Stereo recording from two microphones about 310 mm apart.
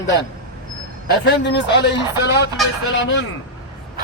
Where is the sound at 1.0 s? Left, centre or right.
Left.